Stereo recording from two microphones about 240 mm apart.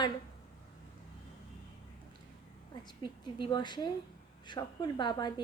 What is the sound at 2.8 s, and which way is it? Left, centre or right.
A woman's voice, centre.